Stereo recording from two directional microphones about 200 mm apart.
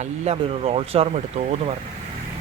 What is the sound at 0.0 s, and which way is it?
Speech, 30° right (ahead or behind).